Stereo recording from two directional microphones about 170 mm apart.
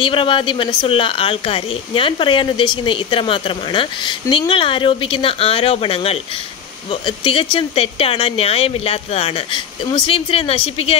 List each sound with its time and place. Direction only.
0.0 s a woman's voice: 30° left (ahead or behind)